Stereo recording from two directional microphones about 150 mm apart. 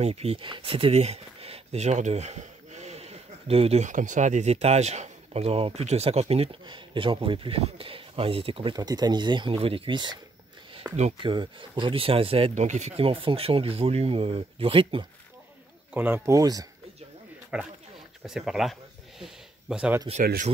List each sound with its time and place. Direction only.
0.0 s speech: 45° right (ahead or behind)
10.8 s speech: 10° right (ahead or behind)
11.2 s speech: 35° right (ahead or behind)
15.9 s speech: 15° right (ahead or behind)
17.5 s speech: 5° right (ahead or behind)
18.2 s a sound: 5° right (ahead or behind)